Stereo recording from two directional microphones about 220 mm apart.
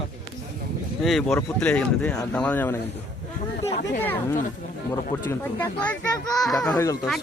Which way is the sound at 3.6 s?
30° left (ahead or behind).